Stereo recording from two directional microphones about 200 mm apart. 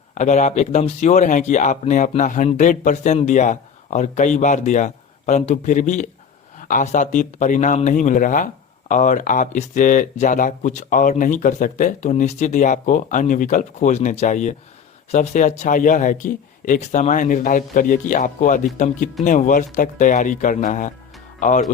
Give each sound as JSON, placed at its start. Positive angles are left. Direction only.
{"t": 0.1, "sound": "speech", "side_deg": 35}